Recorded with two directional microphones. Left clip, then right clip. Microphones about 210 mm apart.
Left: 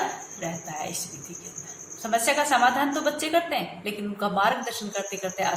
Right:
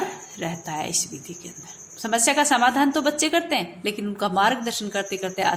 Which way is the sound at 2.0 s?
50° right (ahead or behind).